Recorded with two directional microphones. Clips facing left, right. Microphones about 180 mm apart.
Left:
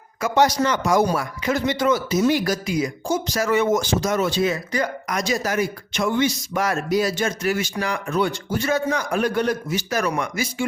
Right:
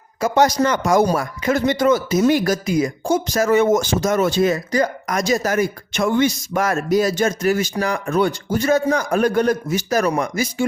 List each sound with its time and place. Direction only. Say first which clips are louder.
0.2 s a man's voice: right 3 dB; 45° right (ahead or behind)